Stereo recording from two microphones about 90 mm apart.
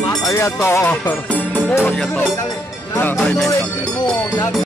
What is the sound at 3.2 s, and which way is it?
Speech, 5° left (ahead or behind).